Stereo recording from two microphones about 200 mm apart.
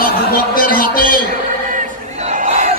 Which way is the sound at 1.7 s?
40° right (ahead or behind).